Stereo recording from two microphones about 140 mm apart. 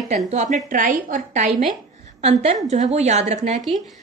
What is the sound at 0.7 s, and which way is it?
Speech, 75° right (ahead or behind).